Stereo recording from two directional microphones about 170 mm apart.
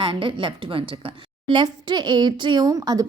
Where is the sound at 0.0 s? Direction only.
30° right (ahead or behind).